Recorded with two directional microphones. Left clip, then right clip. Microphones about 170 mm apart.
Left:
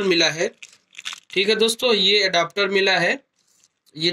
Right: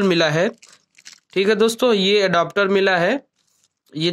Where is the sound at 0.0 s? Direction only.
50° right (ahead or behind).